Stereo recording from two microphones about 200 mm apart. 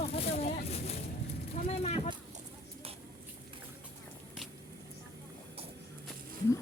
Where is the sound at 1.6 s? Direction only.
30° left (ahead or behind).